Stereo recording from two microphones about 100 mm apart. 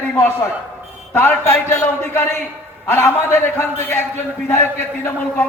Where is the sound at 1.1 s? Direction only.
25° left (ahead or behind).